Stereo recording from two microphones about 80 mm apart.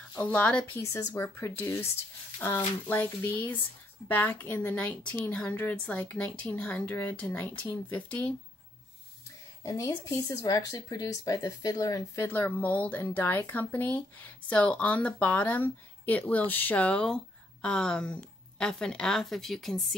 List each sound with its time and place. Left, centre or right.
0.3 s speech: centre
0.9 s speech: left
1.2 s speech: left
9.6 s speech: left
12.3 s speech: left; by 20.0 s centre